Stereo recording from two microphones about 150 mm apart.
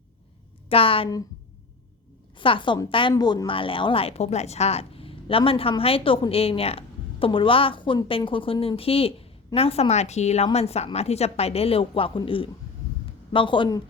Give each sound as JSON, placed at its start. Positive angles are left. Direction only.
{"t": 0.7, "sound": "a woman's voice", "side_deg": 40}
{"t": 2.4, "sound": "a woman's voice", "side_deg": 35}